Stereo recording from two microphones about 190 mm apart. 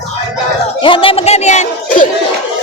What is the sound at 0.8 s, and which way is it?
Speech, 25° left (ahead or behind).